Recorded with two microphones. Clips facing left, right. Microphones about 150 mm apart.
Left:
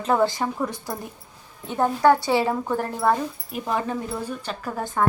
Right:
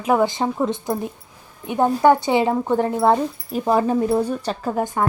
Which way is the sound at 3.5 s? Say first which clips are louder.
Right 8 dB; 35° right (ahead or behind).